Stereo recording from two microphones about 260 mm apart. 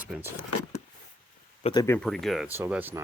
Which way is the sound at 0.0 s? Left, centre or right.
Centre.